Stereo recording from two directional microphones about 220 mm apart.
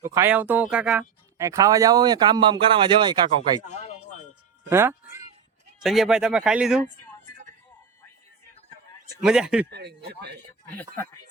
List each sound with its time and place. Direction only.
0.0 s speech: 10° right (ahead or behind)
3.6 s a sound: 30° left (ahead or behind)
4.7 s music: 10° right (ahead or behind)
5.8 s speech: centre (ahead or behind)
9.2 s speech: 5° right (ahead or behind)
9.6 s a man's voice: 50° right (ahead or behind)
10.8 s speech: 10° left (ahead or behind)